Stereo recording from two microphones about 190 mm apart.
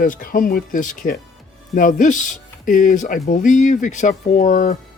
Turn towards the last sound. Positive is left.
turn(degrees=40)  # may be behind; listen again after turning